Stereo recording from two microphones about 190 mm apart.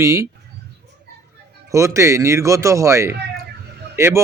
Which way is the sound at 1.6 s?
15° right (ahead or behind).